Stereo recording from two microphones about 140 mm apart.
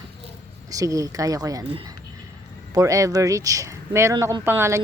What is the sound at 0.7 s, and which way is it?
Speech, 25° right (ahead or behind).